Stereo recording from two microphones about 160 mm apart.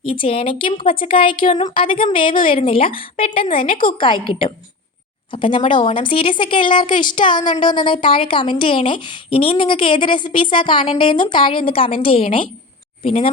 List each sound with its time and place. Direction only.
0.0 s speech: 35° left (ahead or behind)